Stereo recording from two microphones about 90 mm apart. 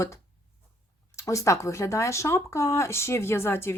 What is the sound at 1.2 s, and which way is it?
Speech, 35° left (ahead or behind).